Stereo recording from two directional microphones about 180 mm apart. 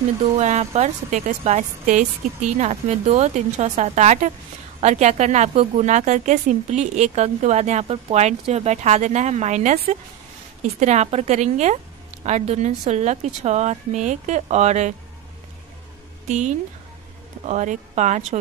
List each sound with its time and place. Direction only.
0.4 s a woman's voice: 40° right (ahead or behind)
16.3 s a woman's voice: 40° right (ahead or behind)